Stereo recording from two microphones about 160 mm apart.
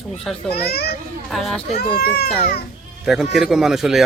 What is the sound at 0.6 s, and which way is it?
Speech, 80° left.